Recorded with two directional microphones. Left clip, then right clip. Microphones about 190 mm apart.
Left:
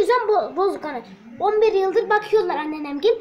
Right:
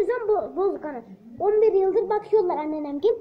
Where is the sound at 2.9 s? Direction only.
15° left (ahead or behind).